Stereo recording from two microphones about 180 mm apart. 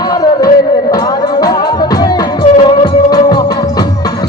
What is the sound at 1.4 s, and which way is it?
Music, 20° left (ahead or behind).